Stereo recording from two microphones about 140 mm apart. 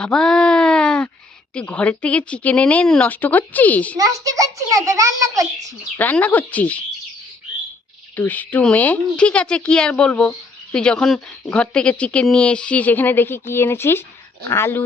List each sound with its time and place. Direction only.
0.0 s speech: 5° left (ahead or behind)
3.9 s a child's voice: 25° right (ahead or behind)
6.0 s speech: 10° left (ahead or behind)
8.1 s speech: 10° left (ahead or behind)